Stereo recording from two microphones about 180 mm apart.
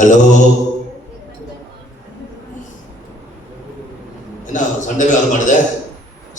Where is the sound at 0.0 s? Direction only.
45° left (ahead or behind).